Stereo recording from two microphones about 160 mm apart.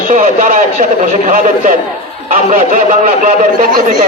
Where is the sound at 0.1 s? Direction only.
55° right (ahead or behind).